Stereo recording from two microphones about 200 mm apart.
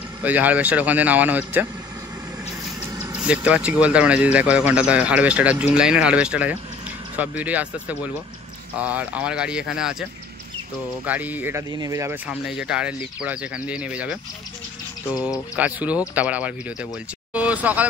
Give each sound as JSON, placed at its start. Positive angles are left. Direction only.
{"t": 0.2, "sound": "speech", "side_deg": -10}
{"t": 3.3, "sound": "speech", "side_deg": -5}
{"t": 11.1, "sound": "speech", "side_deg": -10}
{"t": 12.3, "sound": "speech", "side_deg": -5}